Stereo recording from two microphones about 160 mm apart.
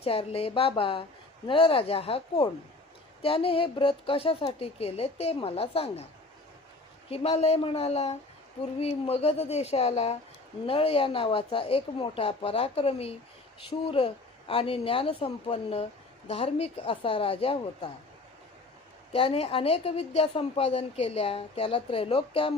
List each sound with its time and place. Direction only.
0.0 s speech: 35° left (ahead or behind)
7.1 s speech: 35° left (ahead or behind)
19.1 s speech: 35° left (ahead or behind)